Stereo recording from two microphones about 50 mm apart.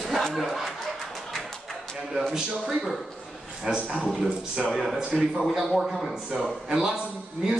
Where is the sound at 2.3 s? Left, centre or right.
Centre.